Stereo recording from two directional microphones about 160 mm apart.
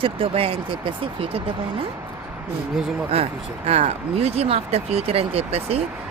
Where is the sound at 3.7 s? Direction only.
40° right (ahead or behind).